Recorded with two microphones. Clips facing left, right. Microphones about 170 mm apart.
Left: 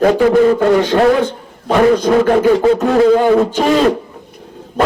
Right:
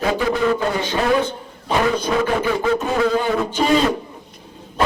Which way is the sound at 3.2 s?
70° left (ahead or behind).